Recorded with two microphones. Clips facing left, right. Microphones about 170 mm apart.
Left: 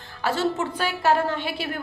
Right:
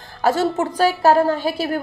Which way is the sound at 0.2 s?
45° right (ahead or behind).